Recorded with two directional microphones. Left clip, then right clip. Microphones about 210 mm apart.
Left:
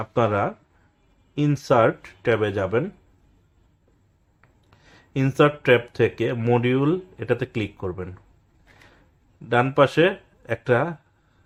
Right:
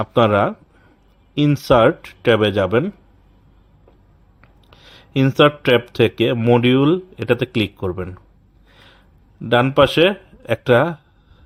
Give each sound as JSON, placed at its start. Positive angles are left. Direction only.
{"t": 0.0, "sound": "speech", "side_deg": -35}
{"t": 4.4, "sound": "speech", "side_deg": -35}
{"t": 9.5, "sound": "speech", "side_deg": -35}